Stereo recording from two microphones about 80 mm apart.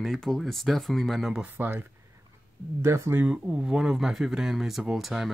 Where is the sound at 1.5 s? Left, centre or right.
Right.